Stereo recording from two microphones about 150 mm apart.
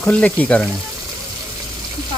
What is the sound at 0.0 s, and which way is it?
Speech, 10° left (ahead or behind).